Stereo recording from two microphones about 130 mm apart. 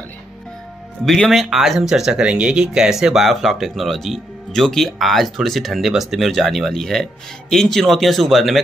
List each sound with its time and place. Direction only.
1.0 s speech: 5° left (ahead or behind)